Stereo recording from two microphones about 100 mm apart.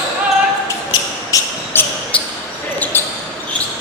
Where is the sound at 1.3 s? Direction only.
35° left (ahead or behind).